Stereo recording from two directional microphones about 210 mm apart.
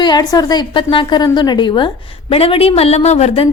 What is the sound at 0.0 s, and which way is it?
A woman's voice, 20° left (ahead or behind).